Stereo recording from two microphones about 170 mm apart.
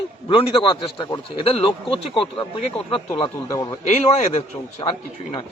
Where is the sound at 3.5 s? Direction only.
20° left (ahead or behind).